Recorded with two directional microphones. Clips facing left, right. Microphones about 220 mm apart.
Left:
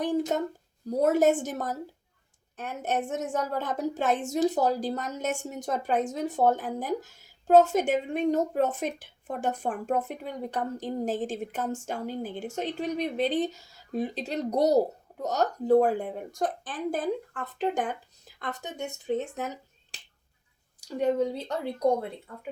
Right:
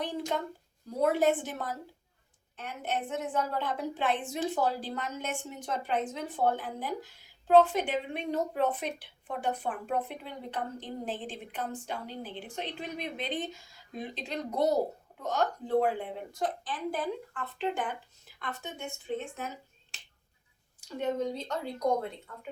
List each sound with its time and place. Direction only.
0.9 s a woman's voice: 40° left (ahead or behind)
21.4 s speech: 30° left (ahead or behind)